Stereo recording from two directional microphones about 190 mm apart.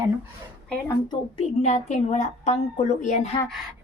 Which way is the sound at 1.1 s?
35° left (ahead or behind).